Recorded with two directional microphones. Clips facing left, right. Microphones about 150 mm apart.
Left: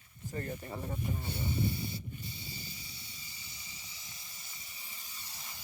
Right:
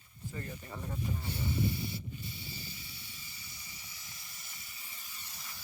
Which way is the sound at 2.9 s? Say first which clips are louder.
Even; 20° left (ahead or behind).